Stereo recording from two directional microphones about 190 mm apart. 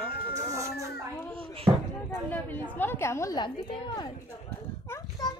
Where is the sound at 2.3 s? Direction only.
10° left (ahead or behind).